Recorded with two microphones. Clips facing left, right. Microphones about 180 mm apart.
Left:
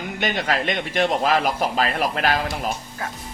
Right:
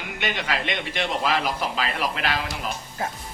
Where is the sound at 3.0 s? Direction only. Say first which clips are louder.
Right 4 dB; 25° right (ahead or behind).